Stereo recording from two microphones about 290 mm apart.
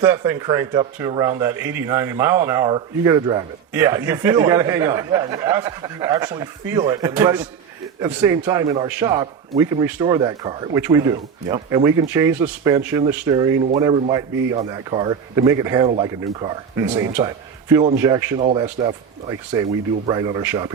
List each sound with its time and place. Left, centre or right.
0.0 s a man's voice: centre